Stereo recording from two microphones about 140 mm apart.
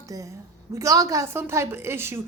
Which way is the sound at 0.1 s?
25° right (ahead or behind).